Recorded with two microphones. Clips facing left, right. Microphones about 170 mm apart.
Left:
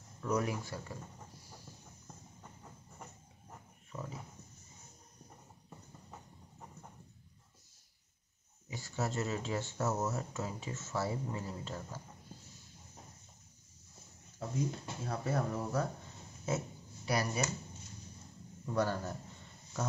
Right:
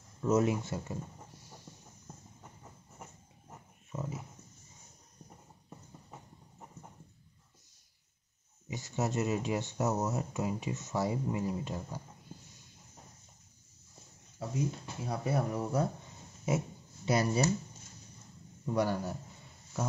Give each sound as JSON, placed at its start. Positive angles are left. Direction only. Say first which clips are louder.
{"t": 0.2, "sound": "speech", "louder": "right 6 dB", "side_deg": -25}
{"t": 3.0, "sound": "dog", "louder": "right 2 dB", "side_deg": -15}
{"t": 8.6, "sound": "speech", "louder": "right 3 dB", "side_deg": -20}
{"t": 14.4, "sound": "a sound", "louder": "right 2 dB", "side_deg": -10}
{"t": 15.0, "sound": "speech", "louder": "right 3 dB", "side_deg": -15}
{"t": 16.4, "sound": "a sound", "louder": "right 4 dB", "side_deg": -20}
{"t": 18.7, "sound": "speech", "louder": "right 3 dB", "side_deg": -15}